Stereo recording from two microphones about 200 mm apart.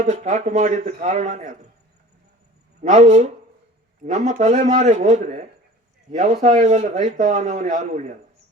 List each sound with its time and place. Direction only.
0.0 s a man's voice: 35° right (ahead or behind)
2.8 s a man's voice: 35° right (ahead or behind)